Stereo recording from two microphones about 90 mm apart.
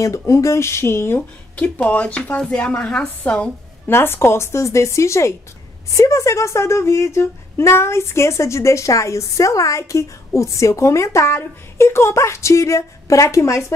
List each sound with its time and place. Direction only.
0.3 s speech: 35° left (ahead or behind)
1.6 s speech: 15° left (ahead or behind)
3.9 s speech: 25° left (ahead or behind)